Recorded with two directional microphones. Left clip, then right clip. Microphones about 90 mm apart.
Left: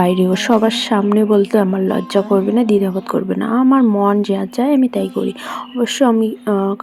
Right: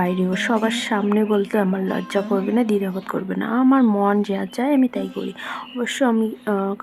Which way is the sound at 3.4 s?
40° left (ahead or behind).